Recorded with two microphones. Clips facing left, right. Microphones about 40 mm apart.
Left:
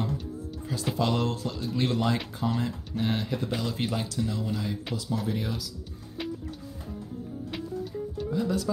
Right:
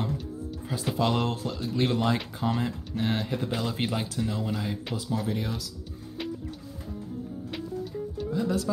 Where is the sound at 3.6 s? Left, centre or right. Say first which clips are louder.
Right 1 dB; right.